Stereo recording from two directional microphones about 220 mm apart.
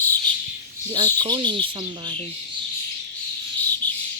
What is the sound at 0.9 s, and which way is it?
Speech, 20° right (ahead or behind).